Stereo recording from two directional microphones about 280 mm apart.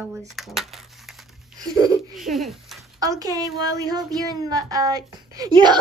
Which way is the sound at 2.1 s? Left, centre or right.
Centre.